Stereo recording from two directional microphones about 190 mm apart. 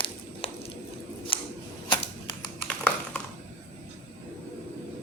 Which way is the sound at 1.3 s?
25° left (ahead or behind).